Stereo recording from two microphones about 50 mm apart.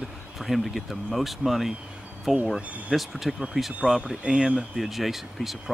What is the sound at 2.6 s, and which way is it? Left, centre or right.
Speech, right.